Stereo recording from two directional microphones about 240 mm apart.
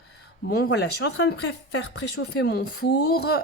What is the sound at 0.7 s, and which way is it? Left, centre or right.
A woman's voice, left.